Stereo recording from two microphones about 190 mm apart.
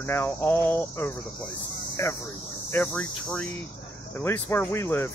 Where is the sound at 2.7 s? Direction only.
5° left (ahead or behind).